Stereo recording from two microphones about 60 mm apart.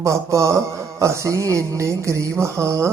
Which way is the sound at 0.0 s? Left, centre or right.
Right.